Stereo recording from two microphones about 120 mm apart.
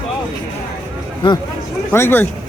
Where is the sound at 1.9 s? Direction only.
20° left (ahead or behind).